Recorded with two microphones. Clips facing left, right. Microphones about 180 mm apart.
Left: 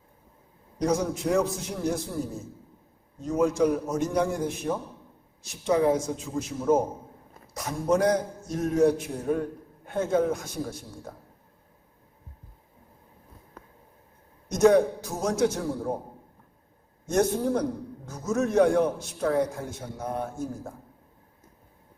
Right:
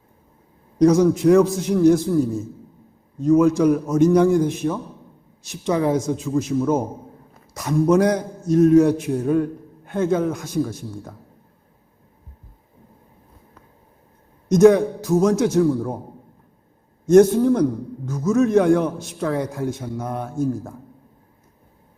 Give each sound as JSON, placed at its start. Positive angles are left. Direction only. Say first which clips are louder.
{"t": 0.8, "sound": "a man's voice", "louder": "right 11 dB", "side_deg": -90}
{"t": 3.2, "sound": "a man's voice", "louder": "right 8 dB", "side_deg": -90}
{"t": 14.5, "sound": "a man's voice", "louder": "right 6 dB", "side_deg": -90}
{"t": 17.2, "sound": "a man's voice", "louder": "right 11 dB", "side_deg": -90}